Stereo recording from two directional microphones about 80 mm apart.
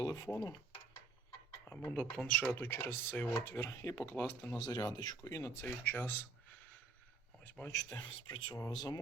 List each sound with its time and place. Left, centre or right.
0.0 s dishes: left
1.6 s speech: left
2.0 s speech: centre
2.5 s speech: left
4.5 s speech: left
5.2 s speech: left
5.6 s speech: left
7.7 s speech: left
8.0 s speech: left
8.7 s speech: left